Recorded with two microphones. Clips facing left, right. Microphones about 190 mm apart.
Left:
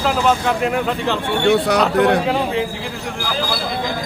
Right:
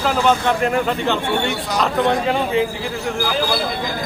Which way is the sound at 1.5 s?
65° left (ahead or behind).